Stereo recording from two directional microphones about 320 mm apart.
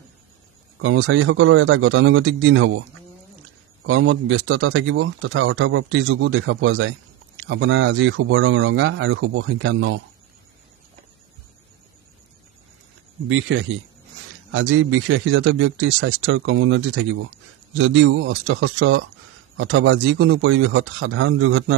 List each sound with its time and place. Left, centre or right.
0.8 s speech: right
3.8 s speech: right
13.3 s speech: right